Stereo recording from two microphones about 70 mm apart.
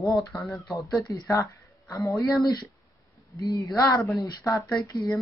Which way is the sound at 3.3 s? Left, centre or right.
Left.